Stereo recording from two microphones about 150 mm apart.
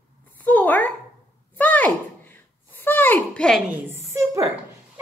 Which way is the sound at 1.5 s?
10° left (ahead or behind).